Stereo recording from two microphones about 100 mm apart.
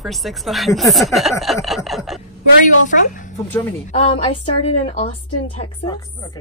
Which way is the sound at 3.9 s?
80° left.